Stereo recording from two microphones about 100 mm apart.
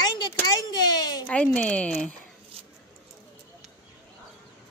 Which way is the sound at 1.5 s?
10° left (ahead or behind).